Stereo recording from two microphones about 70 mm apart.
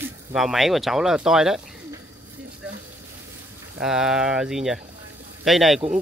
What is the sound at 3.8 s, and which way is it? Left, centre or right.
Speech, centre.